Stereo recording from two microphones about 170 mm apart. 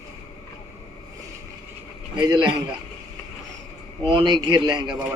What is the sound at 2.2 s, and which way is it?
Speech, 25° right (ahead or behind).